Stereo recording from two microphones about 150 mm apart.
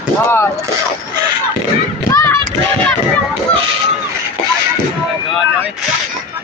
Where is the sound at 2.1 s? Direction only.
15° left (ahead or behind).